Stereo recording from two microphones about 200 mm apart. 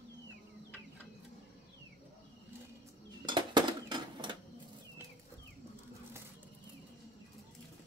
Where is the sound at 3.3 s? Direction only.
20° right (ahead or behind).